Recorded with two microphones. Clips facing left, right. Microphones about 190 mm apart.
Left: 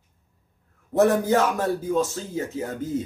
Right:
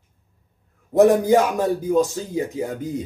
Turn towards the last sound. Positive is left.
turn(degrees=-15)  # may be behind; listen again after turning